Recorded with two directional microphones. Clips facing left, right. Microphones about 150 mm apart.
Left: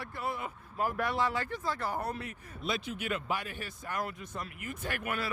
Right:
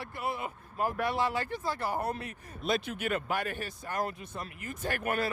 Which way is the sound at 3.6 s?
40° right (ahead or behind).